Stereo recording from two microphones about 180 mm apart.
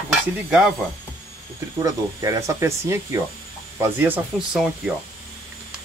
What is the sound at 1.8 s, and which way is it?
Speech, 20° right (ahead or behind).